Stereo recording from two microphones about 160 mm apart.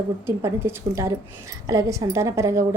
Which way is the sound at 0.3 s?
15° right (ahead or behind).